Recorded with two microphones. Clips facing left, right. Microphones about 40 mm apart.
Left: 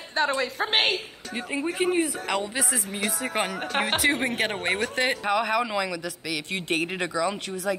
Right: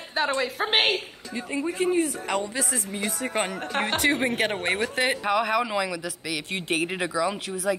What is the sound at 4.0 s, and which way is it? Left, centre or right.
Speech, centre.